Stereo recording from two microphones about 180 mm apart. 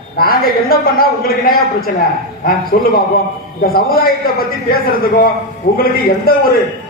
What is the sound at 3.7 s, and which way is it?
A man's voice, 55° left (ahead or behind).